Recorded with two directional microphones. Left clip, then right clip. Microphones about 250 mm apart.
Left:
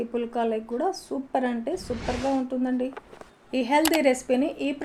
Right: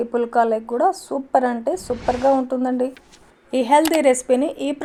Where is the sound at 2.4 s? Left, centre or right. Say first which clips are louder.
Right 7 dB; right.